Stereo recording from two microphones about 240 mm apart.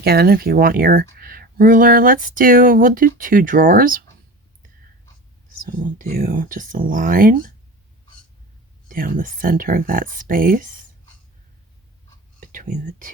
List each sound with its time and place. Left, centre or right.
0.0 s speech: right
5.6 s speech: right
8.9 s speech: right
12.4 s speech: right